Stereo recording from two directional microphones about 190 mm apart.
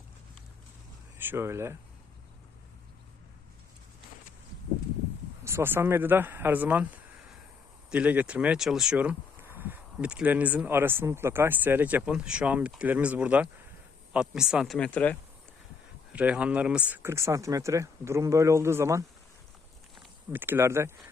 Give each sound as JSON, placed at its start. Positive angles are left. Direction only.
{"t": 1.2, "sound": "speech", "side_deg": -10}
{"t": 5.5, "sound": "speech", "side_deg": -15}
{"t": 16.1, "sound": "speech", "side_deg": -5}